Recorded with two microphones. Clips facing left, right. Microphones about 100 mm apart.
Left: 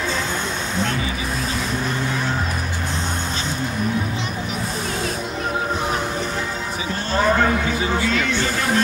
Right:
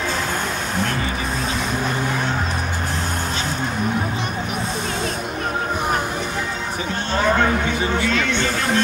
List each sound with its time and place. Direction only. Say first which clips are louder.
8.0 s speech: even; 35° left (ahead or behind)